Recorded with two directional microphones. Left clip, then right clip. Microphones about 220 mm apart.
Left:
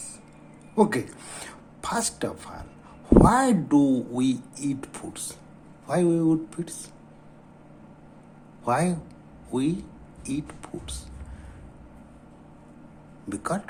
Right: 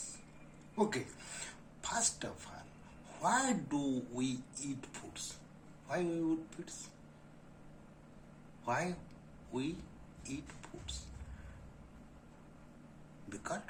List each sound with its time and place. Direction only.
0.8 s speech: 40° left (ahead or behind)
8.6 s a man's voice: 40° left (ahead or behind)
13.3 s speech: 40° left (ahead or behind)